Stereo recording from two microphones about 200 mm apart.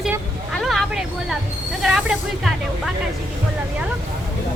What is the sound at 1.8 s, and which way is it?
Speech, centre (ahead or behind).